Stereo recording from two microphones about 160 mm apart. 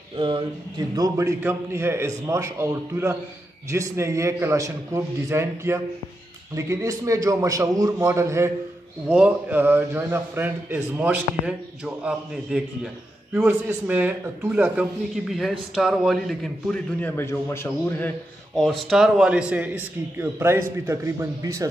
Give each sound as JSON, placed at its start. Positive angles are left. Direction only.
{"t": 0.9, "sound": "a man's voice", "side_deg": -20}
{"t": 18.6, "sound": "a man's voice", "side_deg": 0}